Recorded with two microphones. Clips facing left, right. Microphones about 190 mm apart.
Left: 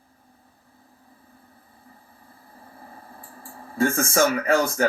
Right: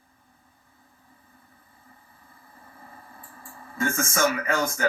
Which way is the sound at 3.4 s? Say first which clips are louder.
Left 6 dB; 35° left (ahead or behind).